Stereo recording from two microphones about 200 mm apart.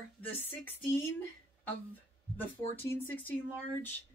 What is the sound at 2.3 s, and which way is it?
Speech, 10° left (ahead or behind).